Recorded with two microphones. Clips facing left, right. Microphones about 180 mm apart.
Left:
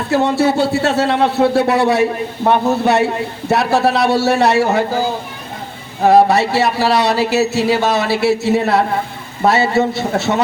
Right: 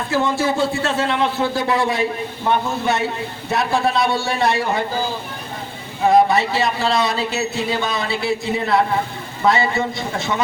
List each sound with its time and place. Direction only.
0.1 s speech: 70° left (ahead or behind)
6.1 s speech: 75° left (ahead or behind)
10.3 s speech: 50° left (ahead or behind)